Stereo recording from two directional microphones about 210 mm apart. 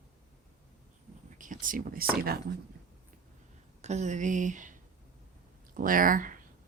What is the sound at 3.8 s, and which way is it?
Speech, 35° right (ahead or behind).